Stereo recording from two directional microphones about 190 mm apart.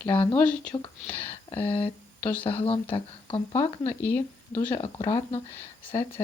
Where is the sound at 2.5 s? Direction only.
30° left (ahead or behind).